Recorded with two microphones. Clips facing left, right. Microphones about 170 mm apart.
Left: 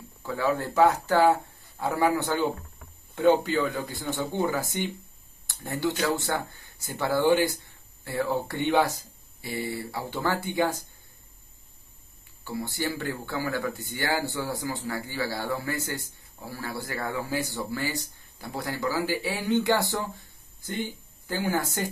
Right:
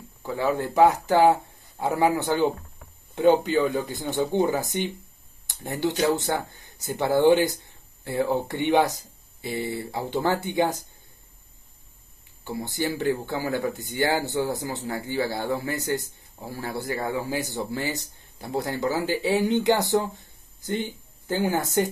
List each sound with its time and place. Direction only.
0.2 s speech: 15° right (ahead or behind)
12.4 s speech: 20° right (ahead or behind)
21.3 s speech: 20° right (ahead or behind)